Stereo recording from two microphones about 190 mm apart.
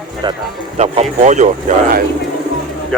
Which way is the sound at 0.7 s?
35° right (ahead or behind).